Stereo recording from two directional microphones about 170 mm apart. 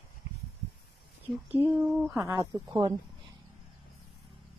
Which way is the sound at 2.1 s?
20° right (ahead or behind).